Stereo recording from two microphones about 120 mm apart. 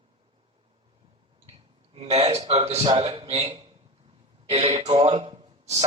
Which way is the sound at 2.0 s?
60° right (ahead or behind).